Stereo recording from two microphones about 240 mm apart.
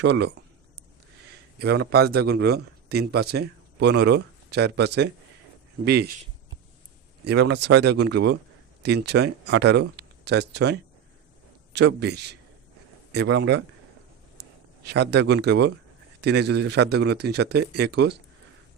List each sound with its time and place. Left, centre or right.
0.0 s speech: right
1.5 s a man's voice: right
7.3 s speech: right
14.8 s speech: right